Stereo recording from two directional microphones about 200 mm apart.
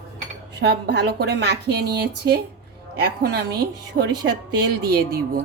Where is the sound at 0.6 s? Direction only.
55° right (ahead or behind).